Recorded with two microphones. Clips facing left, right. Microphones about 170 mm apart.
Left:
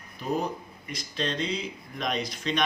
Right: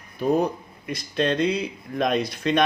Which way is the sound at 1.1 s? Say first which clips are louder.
Right 8 dB; 55° right (ahead or behind).